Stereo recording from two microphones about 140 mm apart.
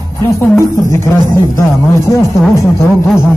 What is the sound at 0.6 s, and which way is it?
A man's voice, 20° left (ahead or behind).